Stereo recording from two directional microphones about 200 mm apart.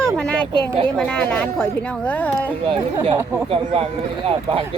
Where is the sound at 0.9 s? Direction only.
5° left (ahead or behind).